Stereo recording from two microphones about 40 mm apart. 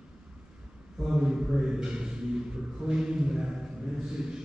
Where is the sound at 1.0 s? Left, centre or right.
Centre.